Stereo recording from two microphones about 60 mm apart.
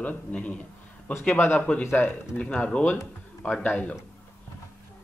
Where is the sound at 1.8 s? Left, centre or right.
Left.